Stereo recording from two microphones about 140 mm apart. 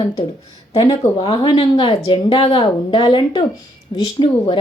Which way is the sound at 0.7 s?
45° left (ahead or behind).